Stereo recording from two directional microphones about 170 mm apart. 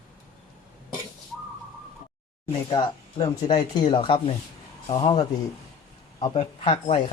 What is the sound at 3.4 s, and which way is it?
Speech, 25° left (ahead or behind).